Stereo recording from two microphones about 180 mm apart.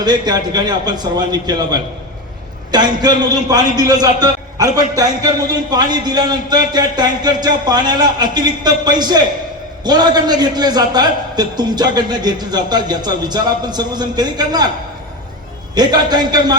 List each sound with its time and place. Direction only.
0.0 s a man's voice: 25° right (ahead or behind)
15.7 s a man's voice: 25° right (ahead or behind)